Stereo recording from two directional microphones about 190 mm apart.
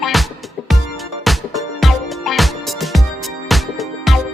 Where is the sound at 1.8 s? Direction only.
Centre (ahead or behind).